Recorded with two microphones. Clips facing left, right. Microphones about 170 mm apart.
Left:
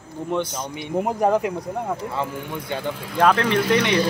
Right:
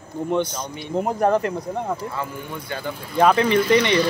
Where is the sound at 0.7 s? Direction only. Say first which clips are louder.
Even; 15° left (ahead or behind).